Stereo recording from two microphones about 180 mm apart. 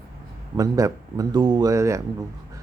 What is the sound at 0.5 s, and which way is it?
Speech, 20° right (ahead or behind).